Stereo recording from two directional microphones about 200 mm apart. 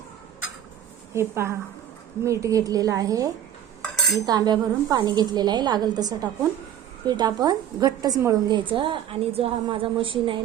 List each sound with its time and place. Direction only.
1.1 s a woman's voice: 15° right (ahead or behind)
3.8 s cutlery: centre (ahead or behind)
4.3 s a woman's voice: 20° right (ahead or behind)